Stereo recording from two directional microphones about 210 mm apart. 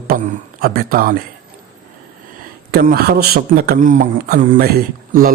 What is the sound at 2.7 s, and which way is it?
Speech, 45° right (ahead or behind).